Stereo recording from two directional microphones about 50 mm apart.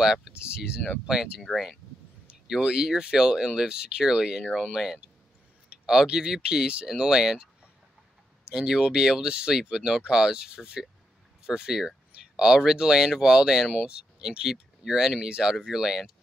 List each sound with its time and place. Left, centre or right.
0.0 s speech: centre
2.2 s speech: centre
8.5 s speech: centre